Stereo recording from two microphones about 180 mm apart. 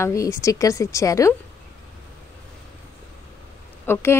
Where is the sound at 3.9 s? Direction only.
10° left (ahead or behind).